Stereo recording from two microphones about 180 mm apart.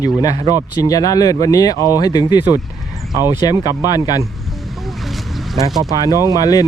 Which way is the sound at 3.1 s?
15° right (ahead or behind).